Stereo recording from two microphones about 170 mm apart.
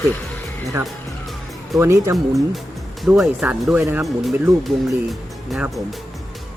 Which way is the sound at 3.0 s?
Centre (ahead or behind).